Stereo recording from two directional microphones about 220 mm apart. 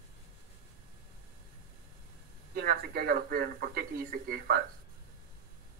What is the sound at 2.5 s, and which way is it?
Speech, 45° right (ahead or behind).